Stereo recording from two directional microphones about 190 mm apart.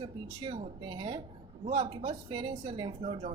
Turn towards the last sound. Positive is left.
turn(degrees=-35)  # may be behind; listen again after turning